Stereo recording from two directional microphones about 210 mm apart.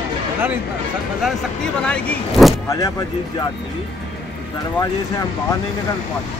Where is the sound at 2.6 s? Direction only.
15° left (ahead or behind).